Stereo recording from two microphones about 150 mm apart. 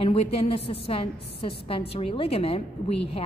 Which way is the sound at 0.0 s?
40° left (ahead or behind).